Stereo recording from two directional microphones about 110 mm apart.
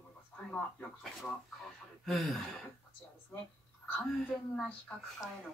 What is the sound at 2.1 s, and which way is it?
Speech, centre (ahead or behind).